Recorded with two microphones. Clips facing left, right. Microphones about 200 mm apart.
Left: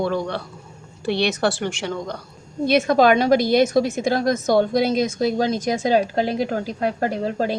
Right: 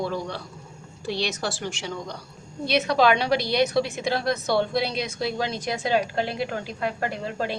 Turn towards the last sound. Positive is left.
turn(degrees=40)  # may be behind; listen again after turning